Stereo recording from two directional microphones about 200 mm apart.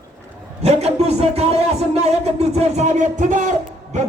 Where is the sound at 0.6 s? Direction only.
30° right (ahead or behind).